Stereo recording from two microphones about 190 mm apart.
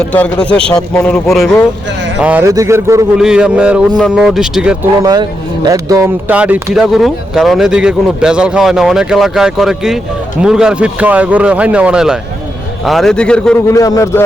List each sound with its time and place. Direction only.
0.1 s a man's voice: 5° left (ahead or behind)
2.2 s a man's voice: 10° right (ahead or behind)
3.2 s speech: 5° right (ahead or behind)
5.6 s speech: 20° right (ahead or behind); by 13.6 s 5° left (ahead or behind)
13.7 s a man's voice: 20° left (ahead or behind)